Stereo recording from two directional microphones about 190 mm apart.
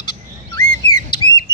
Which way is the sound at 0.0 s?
20° left (ahead or behind).